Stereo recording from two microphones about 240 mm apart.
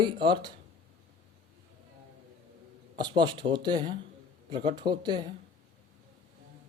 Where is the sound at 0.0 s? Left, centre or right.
Centre.